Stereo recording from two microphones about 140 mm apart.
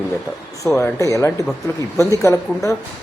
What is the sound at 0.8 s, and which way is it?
A man's voice, 20° left (ahead or behind).